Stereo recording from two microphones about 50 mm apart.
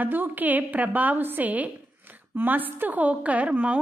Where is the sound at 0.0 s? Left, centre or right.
Right.